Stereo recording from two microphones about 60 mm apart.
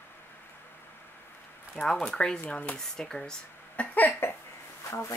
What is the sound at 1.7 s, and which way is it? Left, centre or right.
Speech, centre.